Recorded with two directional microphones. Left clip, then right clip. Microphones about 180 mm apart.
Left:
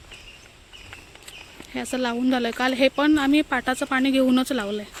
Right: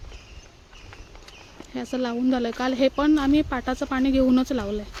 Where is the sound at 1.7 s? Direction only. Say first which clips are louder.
Left 2 dB; 5° right (ahead or behind).